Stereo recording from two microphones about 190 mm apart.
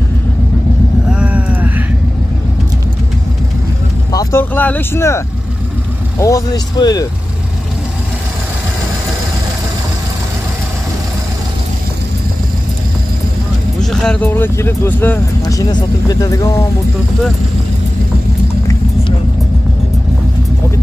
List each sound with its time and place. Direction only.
1.0 s vehicle: 5° right (ahead or behind)
4.1 s speech: 15° left (ahead or behind)
13.7 s speech: 5° left (ahead or behind)